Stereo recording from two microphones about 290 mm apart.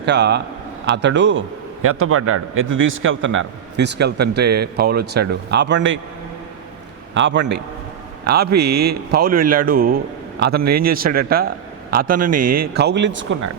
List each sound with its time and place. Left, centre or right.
0.0 s a man's voice: right
7.1 s a man's voice: right
8.5 s a man's voice: right
9.1 s a man's voice: right